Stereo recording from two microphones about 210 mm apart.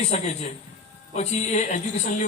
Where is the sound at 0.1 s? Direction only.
30° left (ahead or behind).